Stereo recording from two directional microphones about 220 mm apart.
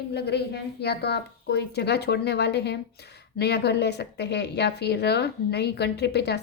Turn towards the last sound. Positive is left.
turn(degrees=50)  # may be behind; listen again after turning